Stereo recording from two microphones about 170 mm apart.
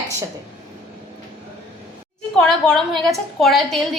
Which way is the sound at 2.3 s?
5° left (ahead or behind).